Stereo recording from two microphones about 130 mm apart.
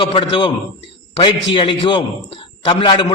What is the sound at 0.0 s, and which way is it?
A man's voice, 40° left (ahead or behind).